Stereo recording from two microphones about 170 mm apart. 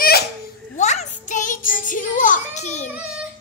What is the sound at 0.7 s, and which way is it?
Child singing, 45° left (ahead or behind).